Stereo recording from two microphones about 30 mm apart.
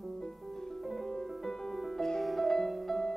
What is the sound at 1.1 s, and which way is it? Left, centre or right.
Music, left.